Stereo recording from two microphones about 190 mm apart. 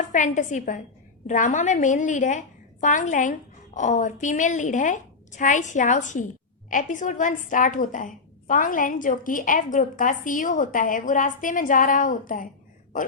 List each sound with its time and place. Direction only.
0.0 s a woman's voice: 40° left (ahead or behind)